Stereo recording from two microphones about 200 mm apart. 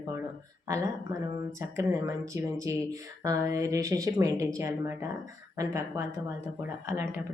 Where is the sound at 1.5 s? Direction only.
15° right (ahead or behind).